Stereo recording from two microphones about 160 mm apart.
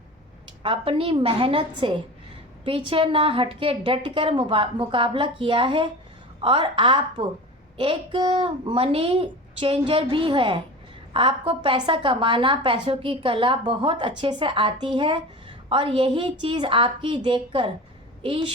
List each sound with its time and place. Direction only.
0.6 s a woman's voice: 35° right (ahead or behind)